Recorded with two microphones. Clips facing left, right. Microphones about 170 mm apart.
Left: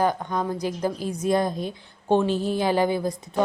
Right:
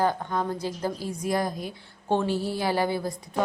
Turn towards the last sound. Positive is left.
turn(degrees=20)  # may be behind; listen again after turning